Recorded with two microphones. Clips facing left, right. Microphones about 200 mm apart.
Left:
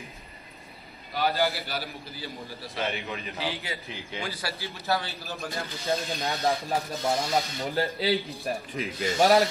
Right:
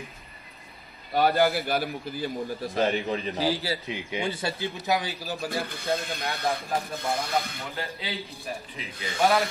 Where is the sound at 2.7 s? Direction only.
35° right (ahead or behind).